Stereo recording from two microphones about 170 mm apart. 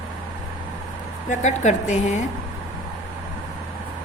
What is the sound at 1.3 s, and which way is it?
Speech, 45° left (ahead or behind).